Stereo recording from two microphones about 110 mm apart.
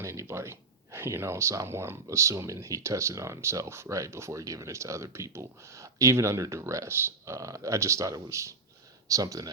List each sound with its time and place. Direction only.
0.0 s speech: 25° right (ahead or behind)